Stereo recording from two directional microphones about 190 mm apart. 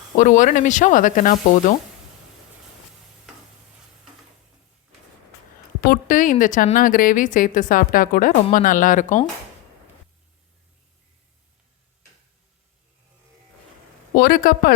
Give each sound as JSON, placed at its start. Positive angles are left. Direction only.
{"t": 0.2, "sound": "a woman's voice", "side_deg": 40}
{"t": 5.8, "sound": "a woman's voice", "side_deg": 45}
{"t": 14.2, "sound": "a woman's voice", "side_deg": 50}